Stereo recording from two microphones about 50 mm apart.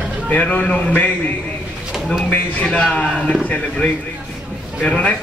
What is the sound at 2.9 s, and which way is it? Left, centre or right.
Speech, left.